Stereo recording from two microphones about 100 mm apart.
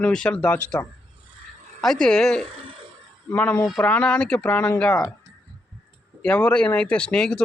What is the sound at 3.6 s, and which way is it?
Speech, 5° left (ahead or behind).